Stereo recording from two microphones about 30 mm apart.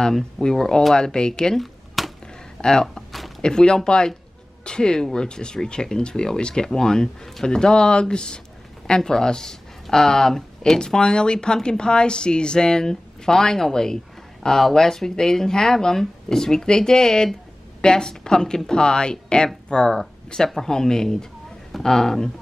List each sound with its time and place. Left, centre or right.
0.4 s speech: left
1.6 s a sound: centre
2.6 s speech: left
3.1 s a sound: centre
3.4 s speech: left
10.8 s speech: left
20.4 s speech: centre